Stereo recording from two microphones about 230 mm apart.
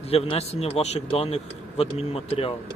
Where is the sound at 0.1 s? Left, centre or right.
Left.